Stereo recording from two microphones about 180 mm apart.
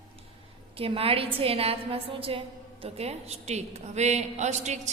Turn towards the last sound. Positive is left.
turn(degrees=-40)  # may be behind; listen again after turning